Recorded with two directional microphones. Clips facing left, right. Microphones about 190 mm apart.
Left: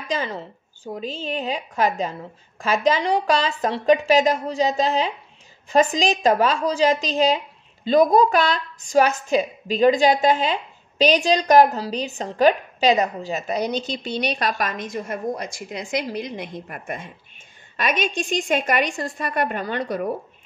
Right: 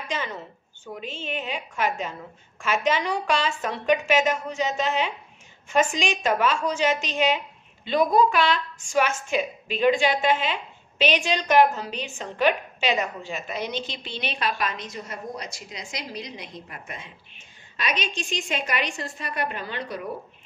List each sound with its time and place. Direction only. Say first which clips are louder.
0.1 s a woman's voice: left 6 dB; 35° left (ahead or behind)